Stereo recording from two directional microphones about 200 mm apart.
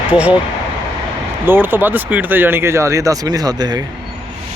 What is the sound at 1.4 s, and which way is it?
Speech, 10° right (ahead or behind).